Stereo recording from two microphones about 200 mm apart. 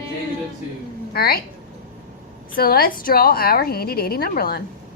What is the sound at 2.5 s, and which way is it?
A woman's voice, 50° left (ahead or behind).